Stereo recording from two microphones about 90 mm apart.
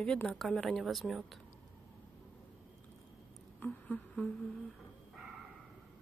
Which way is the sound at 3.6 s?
15° left (ahead or behind).